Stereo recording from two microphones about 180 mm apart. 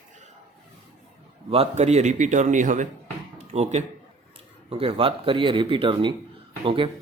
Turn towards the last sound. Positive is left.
turn(degrees=-30)  # may be behind; listen again after turning